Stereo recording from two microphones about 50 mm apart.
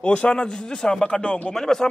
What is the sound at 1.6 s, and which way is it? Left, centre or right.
Speech, centre.